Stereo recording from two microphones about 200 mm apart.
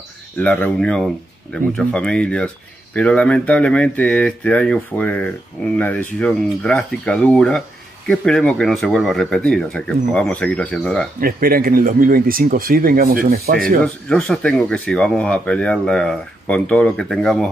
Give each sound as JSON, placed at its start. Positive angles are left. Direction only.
{"t": 0.4, "sound": "speech", "side_deg": 5}
{"t": 11.1, "sound": "speech", "side_deg": -45}
{"t": 13.8, "sound": "speech", "side_deg": 5}